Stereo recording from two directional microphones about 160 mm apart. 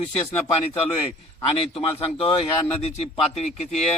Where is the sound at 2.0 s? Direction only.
40° left (ahead or behind).